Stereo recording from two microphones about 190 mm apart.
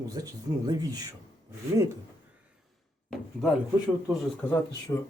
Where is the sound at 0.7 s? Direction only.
20° right (ahead or behind).